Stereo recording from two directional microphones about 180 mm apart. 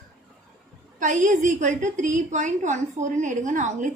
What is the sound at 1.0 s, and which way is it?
A woman's voice, 45° right (ahead or behind).